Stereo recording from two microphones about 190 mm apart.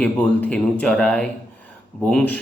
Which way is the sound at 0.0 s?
5° left (ahead or behind).